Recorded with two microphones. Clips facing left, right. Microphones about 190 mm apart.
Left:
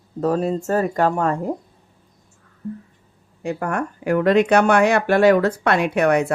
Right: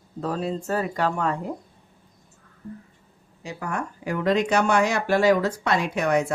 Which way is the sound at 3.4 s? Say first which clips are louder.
Left 7 dB; 55° left (ahead or behind).